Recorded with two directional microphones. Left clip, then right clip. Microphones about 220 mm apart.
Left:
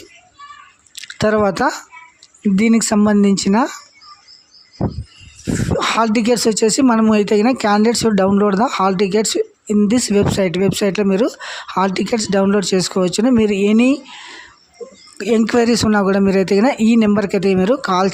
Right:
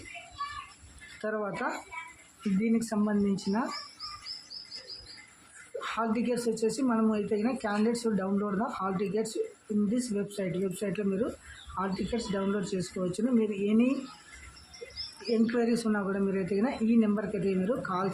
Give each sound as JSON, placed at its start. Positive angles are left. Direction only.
{"t": 1.2, "sound": "speech", "side_deg": 50}
{"t": 5.8, "sound": "speech", "side_deg": 50}
{"t": 15.3, "sound": "speech", "side_deg": 50}